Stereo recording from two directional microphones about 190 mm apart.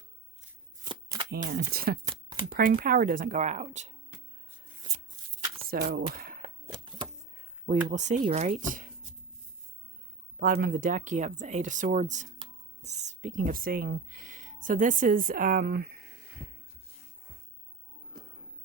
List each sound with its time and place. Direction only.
0.9 s shuffling cards: 25° right (ahead or behind)
1.5 s speech: 55° right (ahead or behind); by 3.9 s 35° right (ahead or behind)
5.6 s speech: 50° right (ahead or behind)
6.1 s cap gun: 50° right (ahead or behind)
6.7 s a sound: 25° right (ahead or behind)
7.9 s speech: 40° right (ahead or behind)
10.4 s speech: 50° right (ahead or behind)
18.1 s a sound: 45° right (ahead or behind)